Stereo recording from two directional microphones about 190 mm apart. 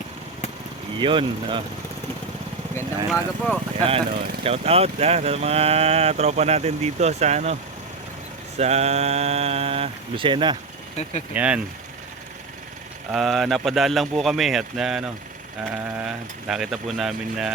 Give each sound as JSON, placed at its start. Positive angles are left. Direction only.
{"t": 0.9, "sound": "speech", "side_deg": -25}
{"t": 3.1, "sound": "speech", "side_deg": 0}
{"t": 3.8, "sound": "speech", "side_deg": -35}
{"t": 11.3, "sound": "speech", "side_deg": -5}
{"t": 13.1, "sound": "speech", "side_deg": 0}